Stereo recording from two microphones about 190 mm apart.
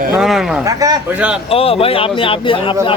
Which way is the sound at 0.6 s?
20° right (ahead or behind).